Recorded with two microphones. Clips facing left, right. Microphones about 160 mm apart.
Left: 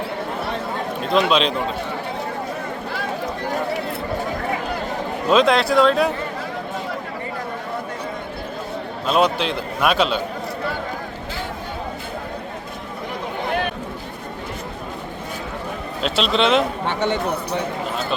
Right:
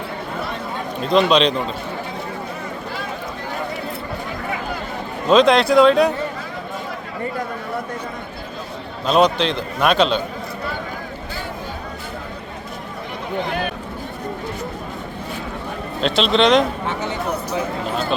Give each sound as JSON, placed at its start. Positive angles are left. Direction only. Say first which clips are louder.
{"t": 1.3, "sound": "a man's voice", "louder": "right 3 dB", "side_deg": 5}
{"t": 5.3, "sound": "a man's voice", "louder": "right 3 dB", "side_deg": 5}
{"t": 9.0, "sound": "a man's voice", "louder": "right 3 dB", "side_deg": 5}
{"t": 16.0, "sound": "a man's voice", "louder": "right 3 dB", "side_deg": 5}